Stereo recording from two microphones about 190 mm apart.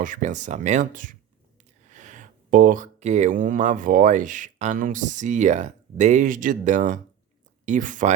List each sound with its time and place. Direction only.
0.0 s speech: 40° right (ahead or behind)